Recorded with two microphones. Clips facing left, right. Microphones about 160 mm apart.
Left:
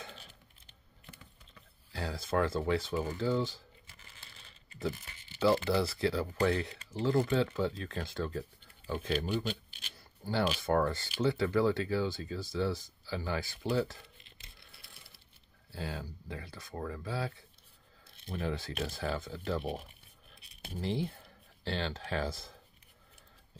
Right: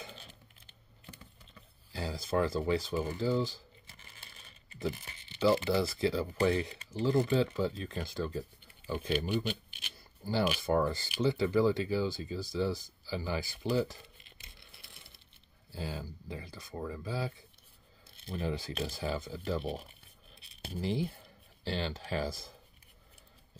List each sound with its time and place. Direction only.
1.9 s speech: centre (ahead or behind)
4.7 s tearing: 20° right (ahead or behind)
5.7 s speech: centre (ahead or behind)
9.3 s a sound: 15° right (ahead or behind)
10.6 s speech: centre (ahead or behind)
15.7 s speech: centre (ahead or behind)
18.3 s speech: centre (ahead or behind)